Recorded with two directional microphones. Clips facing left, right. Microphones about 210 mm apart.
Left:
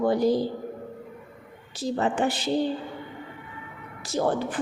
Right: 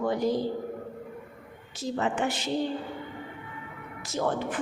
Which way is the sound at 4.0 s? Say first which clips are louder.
Left 4 dB; 35° left (ahead or behind).